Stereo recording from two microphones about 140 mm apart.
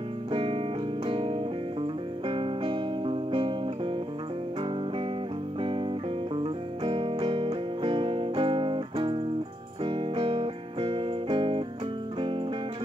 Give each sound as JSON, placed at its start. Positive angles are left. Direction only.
{"t": 0.3, "sound": "music", "side_deg": -40}
{"t": 5.6, "sound": "music", "side_deg": -40}